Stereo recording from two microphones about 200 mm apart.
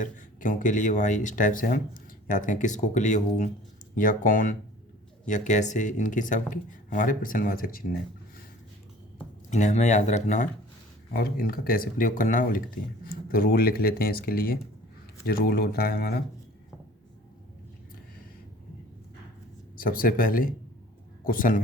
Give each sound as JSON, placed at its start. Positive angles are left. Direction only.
{"t": 0.0, "sound": "speech", "side_deg": 40}
{"t": 9.5, "sound": "speech", "side_deg": 35}
{"t": 19.7, "sound": "speech", "side_deg": 45}